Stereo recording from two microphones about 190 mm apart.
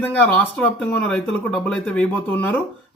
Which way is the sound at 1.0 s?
5° left (ahead or behind).